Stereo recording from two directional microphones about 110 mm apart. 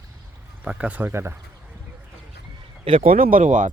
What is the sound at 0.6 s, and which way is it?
Speech, 10° right (ahead or behind).